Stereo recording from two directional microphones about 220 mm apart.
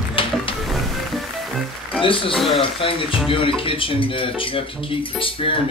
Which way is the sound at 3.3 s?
25° left (ahead or behind).